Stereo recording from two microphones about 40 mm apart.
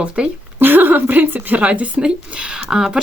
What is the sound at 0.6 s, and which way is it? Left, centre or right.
Speech, right.